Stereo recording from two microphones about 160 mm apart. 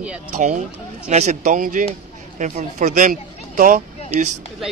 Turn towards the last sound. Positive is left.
turn(degrees=-60)  # may be behind; listen again after turning